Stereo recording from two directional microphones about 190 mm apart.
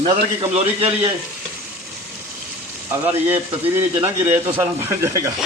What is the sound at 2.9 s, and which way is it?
Frying, 10° right (ahead or behind).